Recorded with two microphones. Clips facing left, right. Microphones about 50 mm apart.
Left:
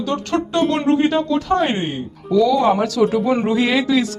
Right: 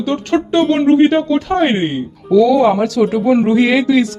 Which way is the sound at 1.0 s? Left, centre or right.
Right.